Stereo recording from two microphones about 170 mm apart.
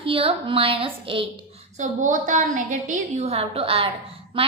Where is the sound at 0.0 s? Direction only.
30° right (ahead or behind).